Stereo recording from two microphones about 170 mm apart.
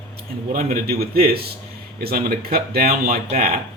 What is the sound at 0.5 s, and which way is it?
Speech, 60° right (ahead or behind).